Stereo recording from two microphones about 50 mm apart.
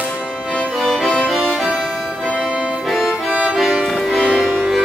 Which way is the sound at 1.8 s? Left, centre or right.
Centre.